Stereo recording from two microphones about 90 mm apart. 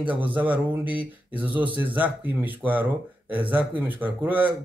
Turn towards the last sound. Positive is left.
turn(degrees=-20)  # may be behind; listen again after turning